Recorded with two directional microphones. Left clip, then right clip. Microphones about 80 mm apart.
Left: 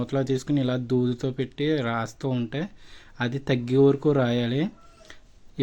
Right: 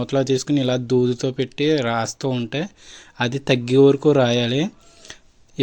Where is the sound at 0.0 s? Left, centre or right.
Right.